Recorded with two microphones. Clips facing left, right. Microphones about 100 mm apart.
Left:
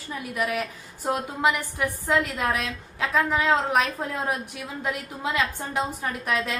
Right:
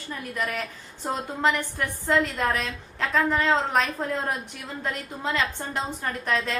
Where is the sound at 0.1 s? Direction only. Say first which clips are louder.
Left 2 dB; 5° left (ahead or behind).